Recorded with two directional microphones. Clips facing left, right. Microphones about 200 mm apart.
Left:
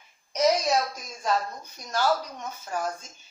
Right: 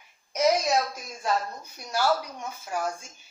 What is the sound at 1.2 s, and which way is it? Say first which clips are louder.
Speech: left 1 dB; 10° right (ahead or behind).